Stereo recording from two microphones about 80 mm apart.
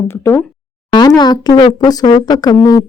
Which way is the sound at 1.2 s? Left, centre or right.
Left.